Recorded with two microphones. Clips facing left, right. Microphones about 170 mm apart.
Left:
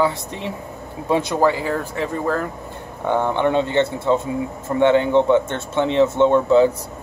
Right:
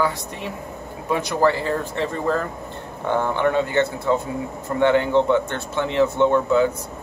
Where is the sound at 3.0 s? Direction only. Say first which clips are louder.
Left 2 dB; 20° left (ahead or behind).